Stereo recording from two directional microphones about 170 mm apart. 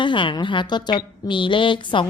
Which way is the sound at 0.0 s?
30° left (ahead or behind).